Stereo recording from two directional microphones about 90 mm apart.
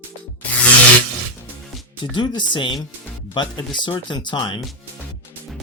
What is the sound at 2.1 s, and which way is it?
Speech, 60° left (ahead or behind).